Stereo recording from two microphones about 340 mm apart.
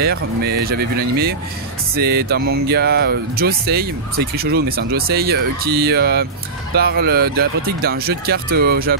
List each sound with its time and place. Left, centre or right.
0.0 s speech: right